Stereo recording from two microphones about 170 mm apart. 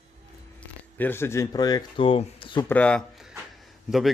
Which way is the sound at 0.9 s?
10° left (ahead or behind).